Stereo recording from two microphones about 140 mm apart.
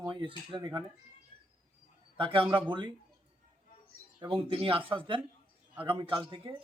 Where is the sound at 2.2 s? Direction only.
40° right (ahead or behind).